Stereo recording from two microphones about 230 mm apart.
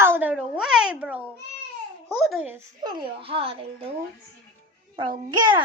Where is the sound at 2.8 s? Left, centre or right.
Right.